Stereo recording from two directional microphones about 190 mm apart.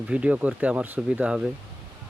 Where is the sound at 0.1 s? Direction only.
5° right (ahead or behind).